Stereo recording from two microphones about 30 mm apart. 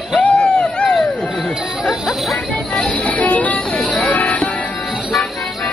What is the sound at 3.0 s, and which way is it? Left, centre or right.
Music, left.